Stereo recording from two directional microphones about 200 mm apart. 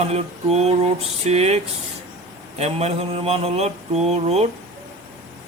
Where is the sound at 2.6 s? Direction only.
30° right (ahead or behind).